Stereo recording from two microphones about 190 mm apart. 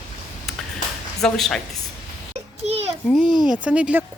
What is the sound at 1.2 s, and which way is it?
Speech, centre (ahead or behind).